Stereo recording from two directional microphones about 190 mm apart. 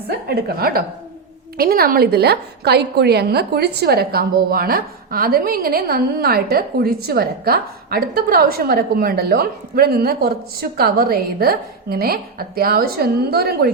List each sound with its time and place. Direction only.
0.3 s a woman's voice: 55° right (ahead or behind)